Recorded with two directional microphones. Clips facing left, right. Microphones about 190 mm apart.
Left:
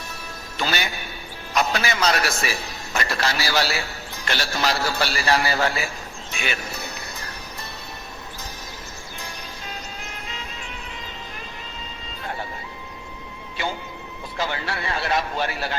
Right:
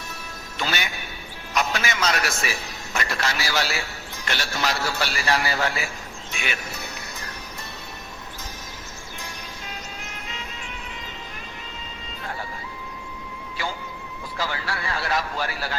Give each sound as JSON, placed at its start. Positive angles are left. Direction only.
{"t": 0.5, "sound": "music", "side_deg": 35}
{"t": 1.5, "sound": "a man's voice", "side_deg": 35}
{"t": 6.3, "sound": "music", "side_deg": 35}
{"t": 10.0, "sound": "music", "side_deg": 35}
{"t": 14.3, "sound": "speech", "side_deg": 25}